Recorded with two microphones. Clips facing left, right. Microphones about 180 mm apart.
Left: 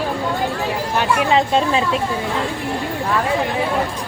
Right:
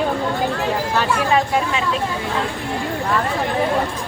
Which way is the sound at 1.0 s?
20° left (ahead or behind).